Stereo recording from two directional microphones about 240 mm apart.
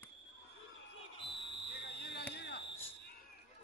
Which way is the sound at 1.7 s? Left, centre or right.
Left.